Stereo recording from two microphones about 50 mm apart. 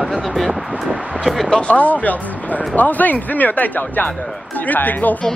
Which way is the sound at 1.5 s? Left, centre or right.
Left.